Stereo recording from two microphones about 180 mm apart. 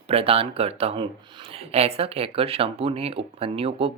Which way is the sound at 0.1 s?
30° right (ahead or behind).